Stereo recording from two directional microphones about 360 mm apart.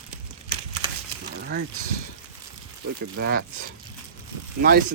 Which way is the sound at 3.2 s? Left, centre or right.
Right.